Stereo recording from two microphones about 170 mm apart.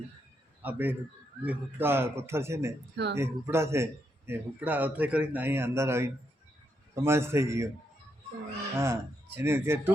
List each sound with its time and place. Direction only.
0.6 s a man's voice: 10° right (ahead or behind)
2.9 s speech: 85° right
3.2 s a man's voice: 15° right (ahead or behind)
8.8 s a man's voice: 15° right (ahead or behind)